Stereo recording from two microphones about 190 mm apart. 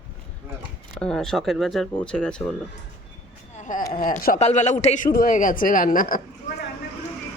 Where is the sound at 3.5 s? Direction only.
40° left (ahead or behind).